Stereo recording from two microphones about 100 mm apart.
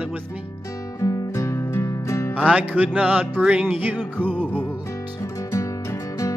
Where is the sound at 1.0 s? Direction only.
35° left (ahead or behind).